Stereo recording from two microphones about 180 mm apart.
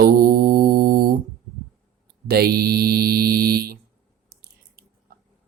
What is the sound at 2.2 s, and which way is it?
Mantra, 60° right (ahead or behind).